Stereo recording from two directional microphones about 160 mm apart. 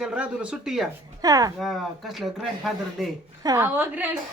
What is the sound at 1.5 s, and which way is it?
Speech, centre (ahead or behind).